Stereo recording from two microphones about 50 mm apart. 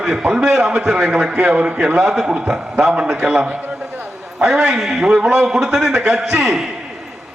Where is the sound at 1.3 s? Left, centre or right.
Right.